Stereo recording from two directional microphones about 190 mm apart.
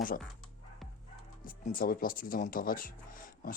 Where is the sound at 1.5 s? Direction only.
50° left (ahead or behind).